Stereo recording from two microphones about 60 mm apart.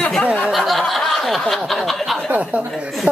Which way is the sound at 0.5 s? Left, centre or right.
Centre.